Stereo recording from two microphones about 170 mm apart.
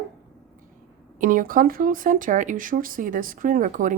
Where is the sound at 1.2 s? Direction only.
55° right (ahead or behind).